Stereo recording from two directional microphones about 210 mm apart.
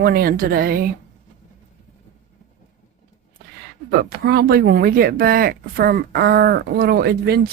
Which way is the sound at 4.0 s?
50° right (ahead or behind).